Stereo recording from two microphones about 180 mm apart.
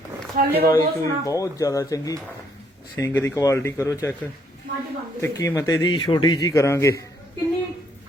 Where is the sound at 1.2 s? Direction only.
20° left (ahead or behind).